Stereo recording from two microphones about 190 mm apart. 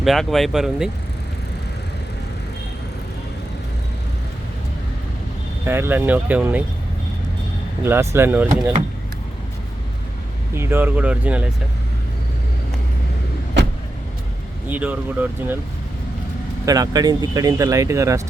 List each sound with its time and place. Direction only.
0.0 s speech: centre (ahead or behind)
5.6 s speech: 10° right (ahead or behind)
7.9 s speech: 10° right (ahead or behind)
10.5 s speech: 10° right (ahead or behind)
14.7 s speech: 10° right (ahead or behind)
16.6 s speech: 20° right (ahead or behind)